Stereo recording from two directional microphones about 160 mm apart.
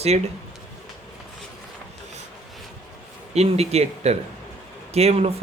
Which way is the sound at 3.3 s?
40° right (ahead or behind).